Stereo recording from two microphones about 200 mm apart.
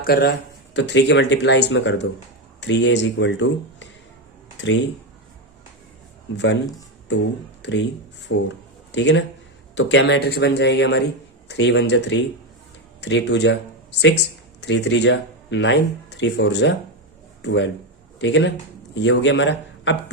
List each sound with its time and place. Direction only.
0.0 s speech: 50° left (ahead or behind)
6.3 s speech: 65° left (ahead or behind)
8.4 s a sound: 65° left (ahead or behind)
9.7 s speech: 65° left (ahead or behind)
14.6 s speech: 60° left (ahead or behind)